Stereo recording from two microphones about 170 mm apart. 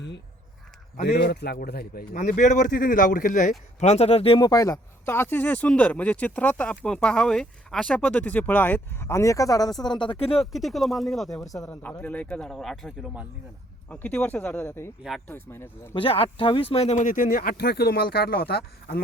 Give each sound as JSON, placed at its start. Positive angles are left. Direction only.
{"t": 1.0, "sound": "speech", "side_deg": 75}
{"t": 3.8, "sound": "speech", "side_deg": 40}
{"t": 10.3, "sound": "speech", "side_deg": 0}
{"t": 16.0, "sound": "speech", "side_deg": 30}